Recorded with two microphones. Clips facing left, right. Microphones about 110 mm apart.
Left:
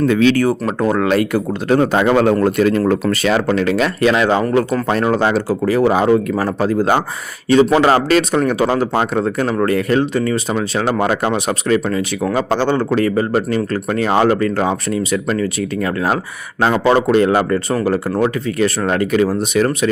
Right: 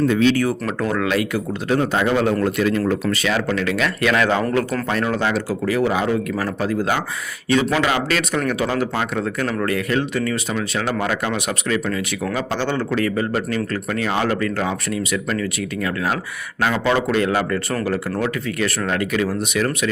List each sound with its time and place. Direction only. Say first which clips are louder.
0.1 s speech: left 3 dB; 90° left
0.6 s a man's voice: left 5 dB; 30° left (ahead or behind); by 2.3 s 55° left (ahead or behind)
2.4 s a man's voice: left 5 dB; 45° left (ahead or behind)
3.5 s speech: left 5 dB; 35° left (ahead or behind)
4.1 s speech: left 4 dB; 25° left (ahead or behind)
4.9 s speech: left 5 dB; 35° left (ahead or behind)